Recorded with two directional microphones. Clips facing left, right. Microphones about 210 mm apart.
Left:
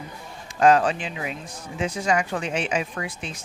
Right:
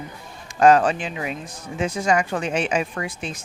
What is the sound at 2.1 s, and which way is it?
A woman's voice, 45° right (ahead or behind).